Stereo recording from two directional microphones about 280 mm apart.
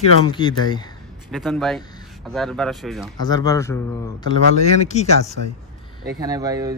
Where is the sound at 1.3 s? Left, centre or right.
Centre.